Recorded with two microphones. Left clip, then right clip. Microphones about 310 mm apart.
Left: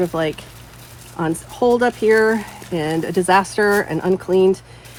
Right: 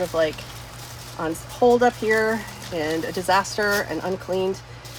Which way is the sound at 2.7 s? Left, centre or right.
Left.